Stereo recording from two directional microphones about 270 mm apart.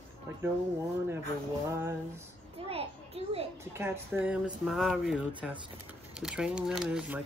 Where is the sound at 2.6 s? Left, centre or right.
Right.